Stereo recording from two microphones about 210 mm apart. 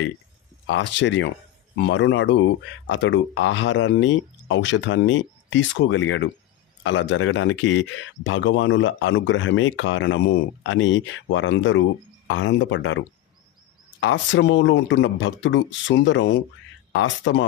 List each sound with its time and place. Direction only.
0.7 s speech: 60° left (ahead or behind)